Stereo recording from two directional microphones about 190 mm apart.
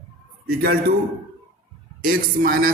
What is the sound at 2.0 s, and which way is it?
Speech, 50° right (ahead or behind).